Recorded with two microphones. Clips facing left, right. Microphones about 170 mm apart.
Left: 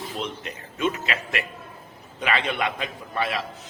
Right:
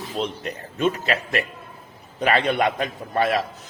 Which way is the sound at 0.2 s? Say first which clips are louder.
Right 8 dB; 35° right (ahead or behind).